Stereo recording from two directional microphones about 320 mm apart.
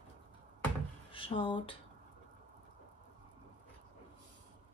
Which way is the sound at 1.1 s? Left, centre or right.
Centre.